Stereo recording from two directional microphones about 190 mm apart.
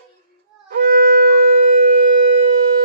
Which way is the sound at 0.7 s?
55° right (ahead or behind).